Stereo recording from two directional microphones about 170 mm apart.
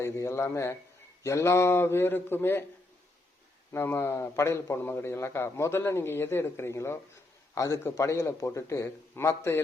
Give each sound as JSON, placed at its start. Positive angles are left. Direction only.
{"t": 0.0, "sound": "a man's voice", "side_deg": 15}
{"t": 3.7, "sound": "a man's voice", "side_deg": 15}